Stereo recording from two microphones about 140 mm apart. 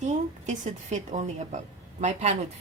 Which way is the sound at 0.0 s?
55° right (ahead or behind).